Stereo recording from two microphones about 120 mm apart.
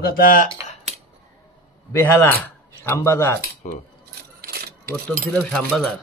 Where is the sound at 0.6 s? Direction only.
20° right (ahead or behind).